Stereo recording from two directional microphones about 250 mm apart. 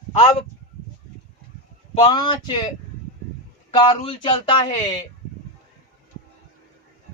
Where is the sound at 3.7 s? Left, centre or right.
Centre.